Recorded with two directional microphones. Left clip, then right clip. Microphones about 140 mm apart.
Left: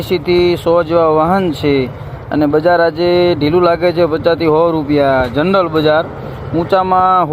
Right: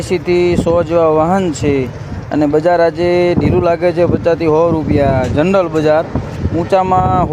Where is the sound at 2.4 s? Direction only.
10° right (ahead or behind).